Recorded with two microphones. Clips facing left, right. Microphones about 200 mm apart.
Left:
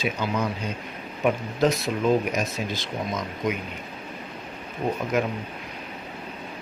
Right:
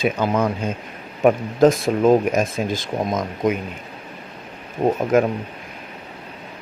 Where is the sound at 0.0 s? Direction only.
50° right (ahead or behind).